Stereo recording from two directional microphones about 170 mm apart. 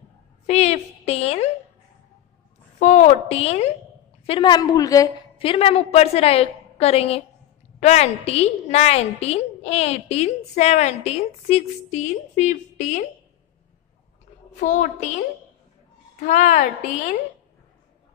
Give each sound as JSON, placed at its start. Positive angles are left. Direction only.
{"t": 0.5, "sound": "a woman's voice", "side_deg": 40}
{"t": 2.8, "sound": "a woman's voice", "side_deg": 40}
{"t": 5.4, "sound": "a woman's voice", "side_deg": 35}
{"t": 14.6, "sound": "a woman's voice", "side_deg": 45}
{"t": 16.2, "sound": "a woman's voice", "side_deg": 45}